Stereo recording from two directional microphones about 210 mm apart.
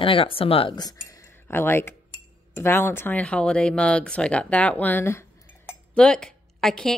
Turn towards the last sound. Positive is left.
turn(degrees=0)  # may be behind; listen again after turning